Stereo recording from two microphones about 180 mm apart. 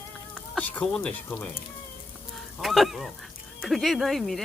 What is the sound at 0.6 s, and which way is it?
Speech, 5° left (ahead or behind).